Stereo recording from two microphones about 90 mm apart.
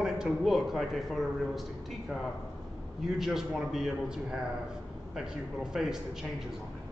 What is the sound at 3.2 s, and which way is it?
A woman's voice, 5° right (ahead or behind).